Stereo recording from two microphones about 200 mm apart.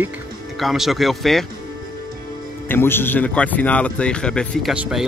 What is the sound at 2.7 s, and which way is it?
A man's voice, 10° left (ahead or behind).